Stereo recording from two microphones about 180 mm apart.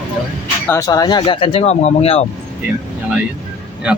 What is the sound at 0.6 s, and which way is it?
Speech, 15° left (ahead or behind).